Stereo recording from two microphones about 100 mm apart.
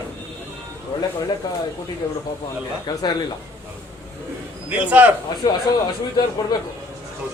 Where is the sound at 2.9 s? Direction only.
45° left (ahead or behind).